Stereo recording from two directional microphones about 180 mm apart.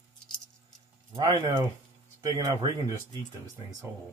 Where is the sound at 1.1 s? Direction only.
25° right (ahead or behind).